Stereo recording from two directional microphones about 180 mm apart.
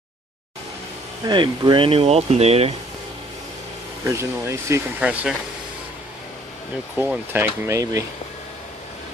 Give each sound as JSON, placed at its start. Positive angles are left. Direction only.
{"t": 1.2, "sound": "speech", "side_deg": -25}
{"t": 4.0, "sound": "speech", "side_deg": -15}
{"t": 7.0, "sound": "speech", "side_deg": -10}